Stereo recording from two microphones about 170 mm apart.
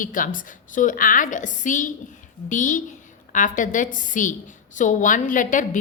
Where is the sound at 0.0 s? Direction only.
50° left (ahead or behind).